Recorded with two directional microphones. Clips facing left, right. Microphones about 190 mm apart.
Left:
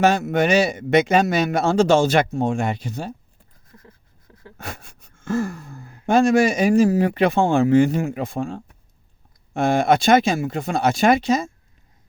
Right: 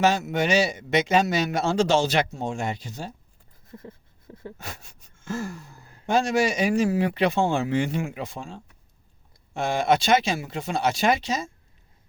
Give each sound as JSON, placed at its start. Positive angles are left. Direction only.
{"t": 0.0, "sound": "speech", "side_deg": 55}
{"t": 3.7, "sound": "a sound", "side_deg": -25}
{"t": 4.5, "sound": "speech", "side_deg": 55}